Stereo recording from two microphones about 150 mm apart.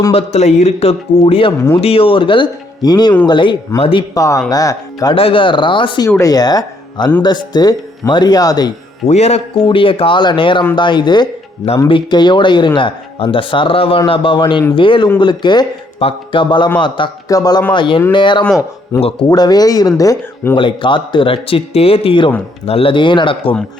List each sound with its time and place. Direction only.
0.1 s speech: 45° left (ahead or behind)
4.1 s speech: 20° left (ahead or behind)
5.1 s speech: 35° left (ahead or behind)
6.1 s speech: 20° left (ahead or behind)
9.0 s a man's voice: 45° left (ahead or behind)
9.6 s speech: 35° left (ahead or behind)
18.9 s speech: 20° left (ahead or behind)
20.6 s speech: 35° left (ahead or behind)